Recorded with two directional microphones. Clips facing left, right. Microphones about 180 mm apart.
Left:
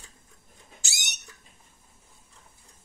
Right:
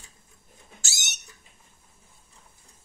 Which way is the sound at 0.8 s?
15° left (ahead or behind).